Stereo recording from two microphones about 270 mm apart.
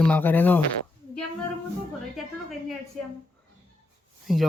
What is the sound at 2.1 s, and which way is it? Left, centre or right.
Speech, centre.